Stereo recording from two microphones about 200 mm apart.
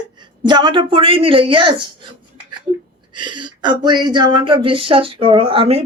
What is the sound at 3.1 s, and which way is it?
Speech, 25° right (ahead or behind).